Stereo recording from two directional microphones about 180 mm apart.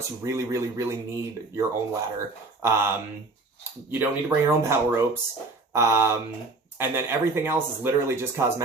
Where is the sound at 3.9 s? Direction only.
15° right (ahead or behind).